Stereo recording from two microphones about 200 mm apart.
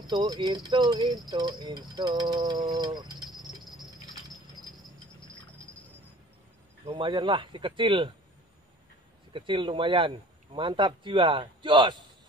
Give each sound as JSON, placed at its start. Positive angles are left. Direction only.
{"t": 0.0, "sound": "speech", "side_deg": -20}
{"t": 3.3, "sound": "cricket", "side_deg": 0}
{"t": 6.9, "sound": "speech", "side_deg": -25}
{"t": 9.3, "sound": "speech", "side_deg": -25}